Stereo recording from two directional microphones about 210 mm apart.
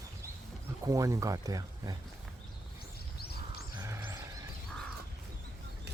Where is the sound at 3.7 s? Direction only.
15° right (ahead or behind).